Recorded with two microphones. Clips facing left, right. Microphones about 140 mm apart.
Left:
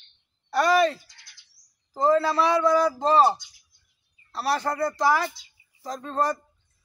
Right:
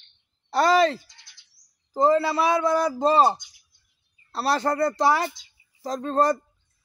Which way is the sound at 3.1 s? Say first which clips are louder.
Even; 20° right (ahead or behind).